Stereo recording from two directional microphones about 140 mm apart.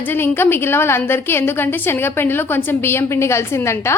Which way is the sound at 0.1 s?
15° left (ahead or behind).